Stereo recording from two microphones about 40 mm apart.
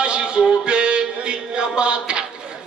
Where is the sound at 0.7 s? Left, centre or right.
Right.